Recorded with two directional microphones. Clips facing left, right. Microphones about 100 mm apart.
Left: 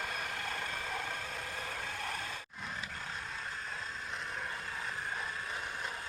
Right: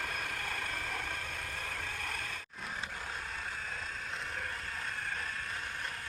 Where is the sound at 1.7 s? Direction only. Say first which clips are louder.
Left 1 dB; 20° left (ahead or behind).